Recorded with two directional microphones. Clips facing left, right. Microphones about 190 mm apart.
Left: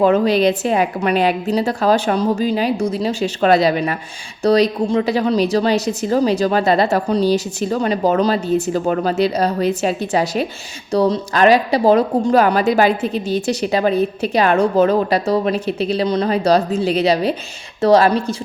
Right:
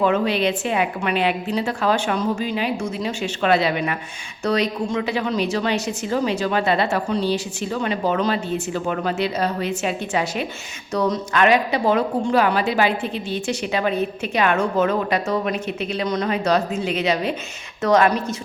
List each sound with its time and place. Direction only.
0.0 s a woman's voice: 40° left (ahead or behind)